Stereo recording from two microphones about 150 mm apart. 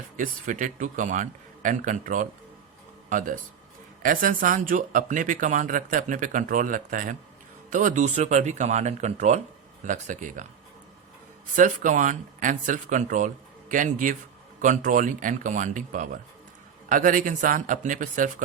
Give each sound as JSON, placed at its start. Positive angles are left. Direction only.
{"t": 0.2, "sound": "speech", "side_deg": -60}
{"t": 11.5, "sound": "speech", "side_deg": -60}